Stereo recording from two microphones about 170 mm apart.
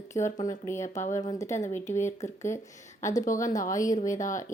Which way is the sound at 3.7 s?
20° left (ahead or behind).